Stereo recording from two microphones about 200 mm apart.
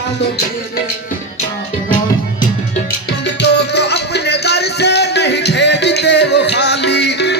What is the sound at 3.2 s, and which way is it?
Music, 60° left (ahead or behind).